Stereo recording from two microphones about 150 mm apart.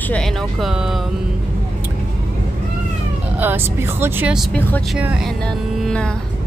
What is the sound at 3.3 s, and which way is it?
Speech, 15° right (ahead or behind).